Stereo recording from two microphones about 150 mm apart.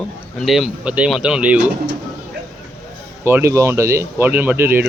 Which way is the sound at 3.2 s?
15° right (ahead or behind).